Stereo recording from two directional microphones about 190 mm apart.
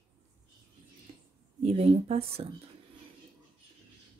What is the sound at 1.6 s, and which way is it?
Speech, 30° right (ahead or behind).